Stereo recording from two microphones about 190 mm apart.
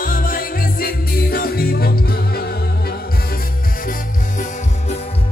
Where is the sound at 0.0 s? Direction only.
50° left (ahead or behind).